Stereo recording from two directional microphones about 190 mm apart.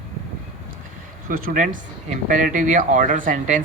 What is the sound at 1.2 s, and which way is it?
Speech, 45° right (ahead or behind).